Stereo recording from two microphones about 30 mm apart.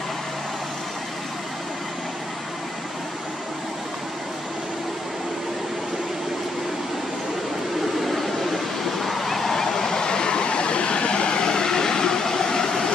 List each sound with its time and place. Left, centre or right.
8.0 s waves: centre